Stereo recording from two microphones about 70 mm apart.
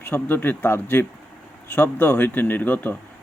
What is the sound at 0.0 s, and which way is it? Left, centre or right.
Speech, left.